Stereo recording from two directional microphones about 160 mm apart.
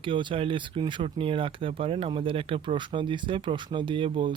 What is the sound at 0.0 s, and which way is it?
Speech, 30° right (ahead or behind).